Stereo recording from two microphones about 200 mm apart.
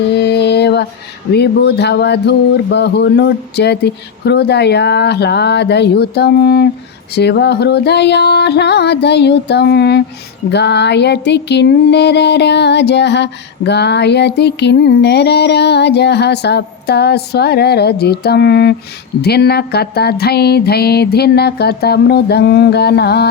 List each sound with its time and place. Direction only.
0.2 s mantra: 55° left (ahead or behind)
1.3 s music: 55° left (ahead or behind)
19.2 s a sound: 55° left (ahead or behind)